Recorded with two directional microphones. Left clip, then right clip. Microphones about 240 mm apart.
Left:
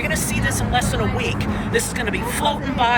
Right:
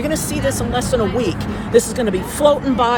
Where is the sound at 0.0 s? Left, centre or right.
Centre.